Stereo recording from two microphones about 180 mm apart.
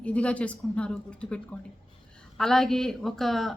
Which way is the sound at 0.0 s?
5° left (ahead or behind).